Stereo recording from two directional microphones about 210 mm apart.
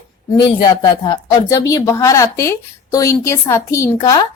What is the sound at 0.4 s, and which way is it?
Speech, 20° left (ahead or behind).